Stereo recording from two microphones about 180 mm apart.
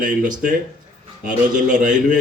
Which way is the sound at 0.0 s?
45° right (ahead or behind).